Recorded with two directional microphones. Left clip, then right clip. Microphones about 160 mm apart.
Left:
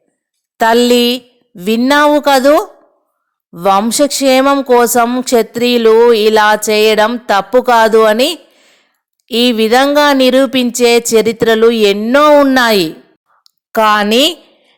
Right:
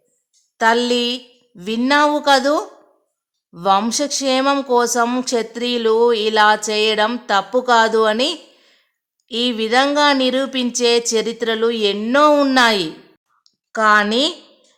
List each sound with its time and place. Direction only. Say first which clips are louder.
0.5 s a woman's voice: left 7 dB; 40° left (ahead or behind)
12.3 s a woman's voice: left 8 dB; 20° left (ahead or behind)
12.5 s speech: left 4 dB; 35° left (ahead or behind)